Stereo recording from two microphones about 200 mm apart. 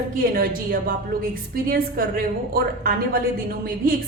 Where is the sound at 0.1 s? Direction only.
45° right (ahead or behind).